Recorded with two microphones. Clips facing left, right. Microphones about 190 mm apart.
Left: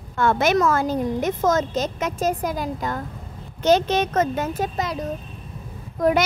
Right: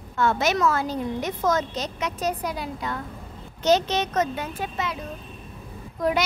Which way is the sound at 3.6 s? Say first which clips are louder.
Left 3 dB; 55° left (ahead or behind).